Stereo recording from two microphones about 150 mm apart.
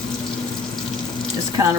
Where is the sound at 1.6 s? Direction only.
20° right (ahead or behind).